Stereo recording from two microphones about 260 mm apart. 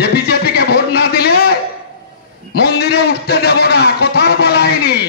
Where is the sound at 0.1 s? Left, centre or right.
Left.